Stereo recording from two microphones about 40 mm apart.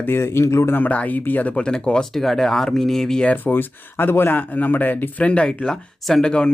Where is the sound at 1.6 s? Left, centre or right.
Left.